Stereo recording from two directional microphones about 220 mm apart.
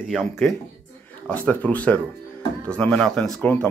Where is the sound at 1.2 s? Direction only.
5° left (ahead or behind).